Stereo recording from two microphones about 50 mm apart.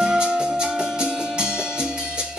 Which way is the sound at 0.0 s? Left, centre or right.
Centre.